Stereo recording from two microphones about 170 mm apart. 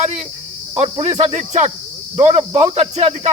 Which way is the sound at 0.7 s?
40° right (ahead or behind).